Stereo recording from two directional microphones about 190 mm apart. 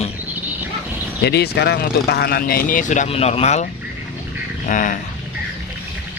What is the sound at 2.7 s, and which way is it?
A man's voice, 45° left (ahead or behind).